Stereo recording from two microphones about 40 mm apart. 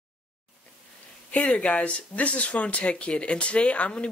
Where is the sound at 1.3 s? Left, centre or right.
Left.